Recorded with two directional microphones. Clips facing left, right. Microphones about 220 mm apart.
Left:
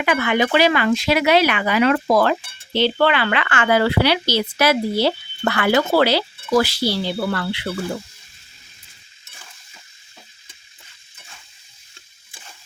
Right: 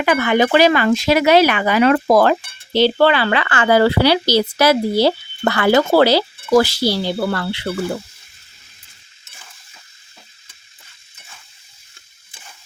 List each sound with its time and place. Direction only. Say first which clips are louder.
0.0 s speech: right 4 dB; 40° right (ahead or behind)